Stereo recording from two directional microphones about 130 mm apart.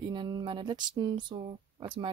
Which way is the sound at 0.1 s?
40° right (ahead or behind).